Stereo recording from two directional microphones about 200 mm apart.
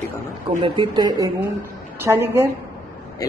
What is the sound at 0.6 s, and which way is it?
A woman's voice, 25° right (ahead or behind).